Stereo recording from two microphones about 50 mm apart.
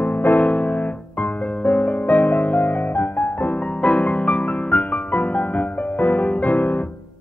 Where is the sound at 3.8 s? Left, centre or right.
Centre.